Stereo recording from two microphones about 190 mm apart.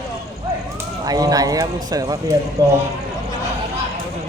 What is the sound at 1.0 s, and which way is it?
Speech, 20° right (ahead or behind).